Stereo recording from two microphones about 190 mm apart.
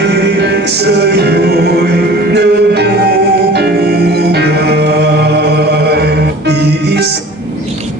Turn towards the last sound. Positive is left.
turn(degrees=-60)  # may be behind; listen again after turning